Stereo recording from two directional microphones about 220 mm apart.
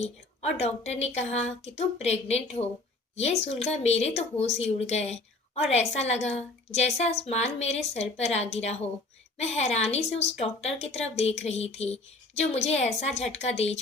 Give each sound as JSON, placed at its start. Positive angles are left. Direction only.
{"t": 0.5, "sound": "a woman's voice", "side_deg": 30}